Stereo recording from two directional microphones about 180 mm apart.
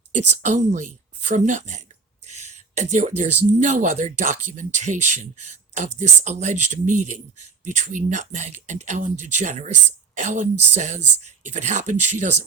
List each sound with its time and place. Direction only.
0.1 s speech: 40° right (ahead or behind)
2.2 s a sound: 40° right (ahead or behind)
3.6 s speech: 45° right (ahead or behind)